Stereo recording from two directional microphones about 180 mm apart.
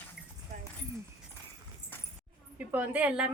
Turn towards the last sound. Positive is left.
turn(degrees=-5)  # may be behind; listen again after turning